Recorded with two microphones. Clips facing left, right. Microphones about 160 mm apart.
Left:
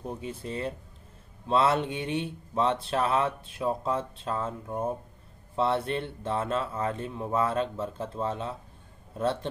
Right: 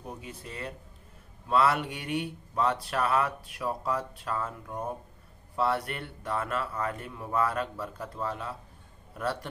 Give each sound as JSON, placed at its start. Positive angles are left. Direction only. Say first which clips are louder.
{"t": 0.2, "sound": "speech", "louder": "left 7 dB", "side_deg": 30}